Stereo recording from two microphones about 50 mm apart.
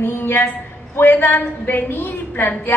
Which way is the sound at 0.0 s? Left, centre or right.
Left.